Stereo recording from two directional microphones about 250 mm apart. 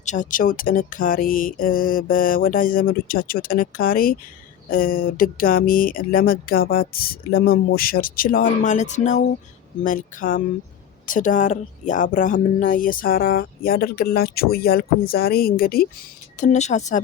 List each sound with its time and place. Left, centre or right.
0.0 s a woman's voice: left